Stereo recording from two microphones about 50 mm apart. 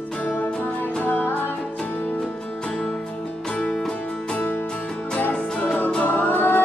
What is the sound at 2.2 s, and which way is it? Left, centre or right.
Music, centre.